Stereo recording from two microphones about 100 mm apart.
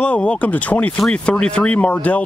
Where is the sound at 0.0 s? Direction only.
10° left (ahead or behind).